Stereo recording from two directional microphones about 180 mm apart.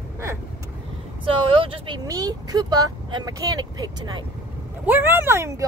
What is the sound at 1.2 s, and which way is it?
Speech, 30° right (ahead or behind).